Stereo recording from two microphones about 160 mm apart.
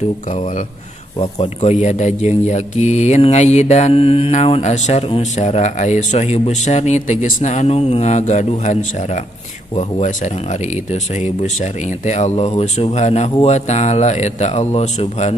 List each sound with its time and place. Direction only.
1.2 s speech: 40° left (ahead or behind)